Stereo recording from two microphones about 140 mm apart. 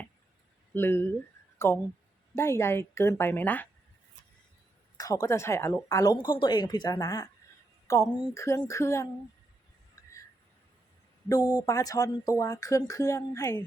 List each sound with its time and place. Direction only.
0.7 s a woman's voice: 15° left (ahead or behind)
4.9 s speech: 25° left (ahead or behind)
9.9 s a sound: 20° left (ahead or behind)
11.6 s speech: 25° left (ahead or behind)